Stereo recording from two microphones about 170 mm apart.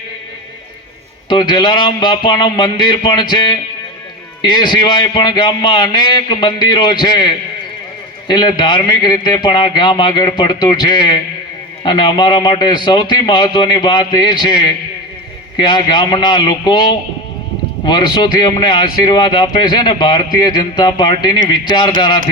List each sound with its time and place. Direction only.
1.3 s a man's voice: 25° left (ahead or behind)